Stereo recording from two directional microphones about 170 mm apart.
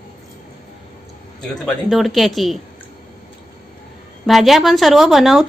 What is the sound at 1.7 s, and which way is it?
Speech, centre (ahead or behind).